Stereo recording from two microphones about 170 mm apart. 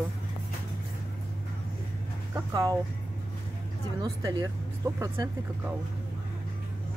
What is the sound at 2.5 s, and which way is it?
Speech, 20° right (ahead or behind).